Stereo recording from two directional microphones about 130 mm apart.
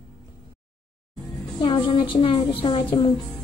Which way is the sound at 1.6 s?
40° left (ahead or behind).